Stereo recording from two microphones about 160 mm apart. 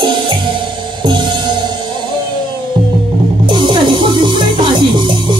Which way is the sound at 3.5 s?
30° right (ahead or behind).